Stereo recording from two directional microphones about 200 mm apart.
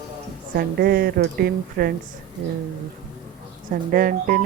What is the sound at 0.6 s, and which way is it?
Speech, 50° right (ahead or behind).